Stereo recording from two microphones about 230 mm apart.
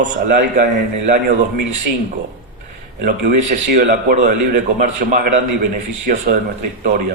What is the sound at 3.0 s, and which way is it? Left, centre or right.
A man's voice, right.